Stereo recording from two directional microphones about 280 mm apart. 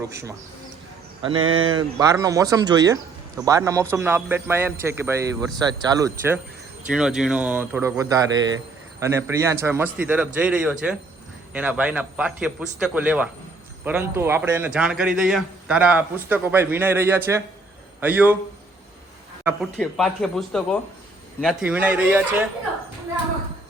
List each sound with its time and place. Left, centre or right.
0.1 s speech: centre
1.4 s speech: right
1.7 s a man's voice: centre
19.5 s a man's voice: centre